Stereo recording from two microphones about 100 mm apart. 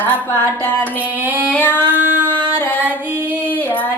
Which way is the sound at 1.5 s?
20° left (ahead or behind).